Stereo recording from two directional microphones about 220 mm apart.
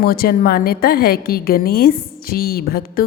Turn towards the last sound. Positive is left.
turn(degrees=45)  # may be behind; listen again after turning